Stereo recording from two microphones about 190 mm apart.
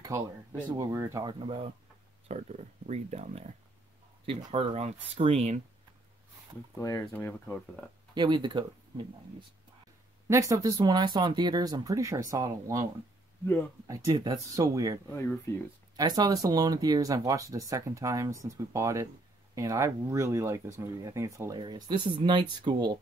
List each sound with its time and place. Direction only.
0.0 s speech: 20° right (ahead or behind); by 5.6 s 35° right (ahead or behind)
6.8 s speech: 15° left (ahead or behind)
8.1 s speech: 25° right (ahead or behind)
10.2 s speech: 15° right (ahead or behind)
13.8 s speech: 20° right (ahead or behind)
15.0 s speech: 15° left (ahead or behind)
16.0 s speech: 20° right (ahead or behind)